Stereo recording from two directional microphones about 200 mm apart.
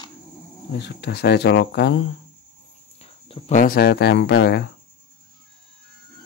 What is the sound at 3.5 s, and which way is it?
Speech, 45° left (ahead or behind).